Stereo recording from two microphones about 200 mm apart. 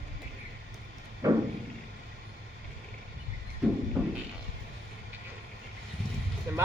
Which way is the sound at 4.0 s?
5° right (ahead or behind).